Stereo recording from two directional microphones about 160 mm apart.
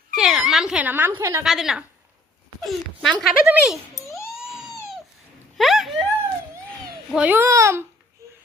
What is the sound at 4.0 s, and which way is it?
Baby cry, 20° left (ahead or behind).